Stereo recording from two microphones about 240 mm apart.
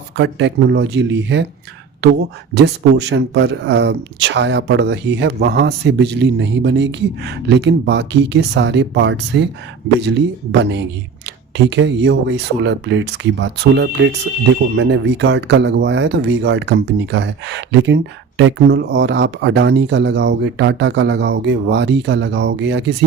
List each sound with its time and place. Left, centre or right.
0.2 s speech: right